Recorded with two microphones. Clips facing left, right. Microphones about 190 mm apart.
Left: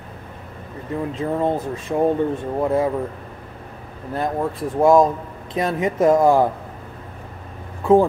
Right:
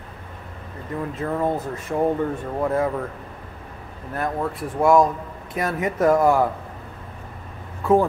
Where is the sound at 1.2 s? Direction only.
15° left (ahead or behind).